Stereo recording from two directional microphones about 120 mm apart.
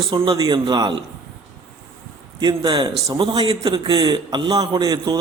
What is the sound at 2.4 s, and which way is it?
A man's voice, 35° right (ahead or behind).